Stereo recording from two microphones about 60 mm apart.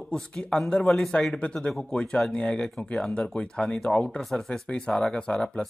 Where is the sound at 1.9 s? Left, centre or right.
Centre.